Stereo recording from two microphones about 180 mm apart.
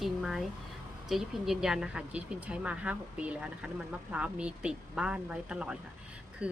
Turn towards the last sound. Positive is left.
turn(degrees=-5)  # may be behind; listen again after turning